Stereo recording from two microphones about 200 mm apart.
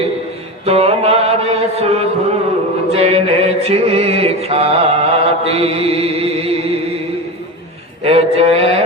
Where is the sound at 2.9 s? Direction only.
30° right (ahead or behind).